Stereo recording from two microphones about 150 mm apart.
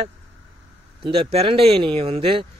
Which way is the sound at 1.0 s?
40° right (ahead or behind).